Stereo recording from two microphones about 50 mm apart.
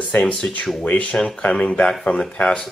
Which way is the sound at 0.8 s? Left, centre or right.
Left.